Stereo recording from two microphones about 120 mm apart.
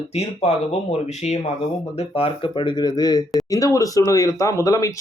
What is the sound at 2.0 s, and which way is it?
Speech, 50° left (ahead or behind).